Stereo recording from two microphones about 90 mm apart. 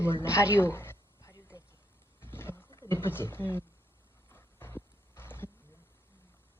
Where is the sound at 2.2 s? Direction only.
25° left (ahead or behind).